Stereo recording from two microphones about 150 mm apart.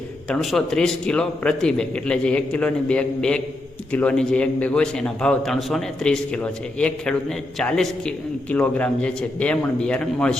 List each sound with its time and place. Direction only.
0.3 s a man's voice: 5° left (ahead or behind)